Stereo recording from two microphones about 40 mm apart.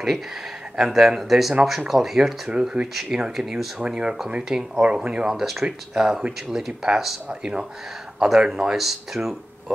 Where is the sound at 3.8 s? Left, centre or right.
Right.